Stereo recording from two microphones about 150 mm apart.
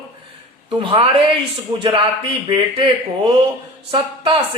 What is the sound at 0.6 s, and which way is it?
Speech, 35° right (ahead or behind).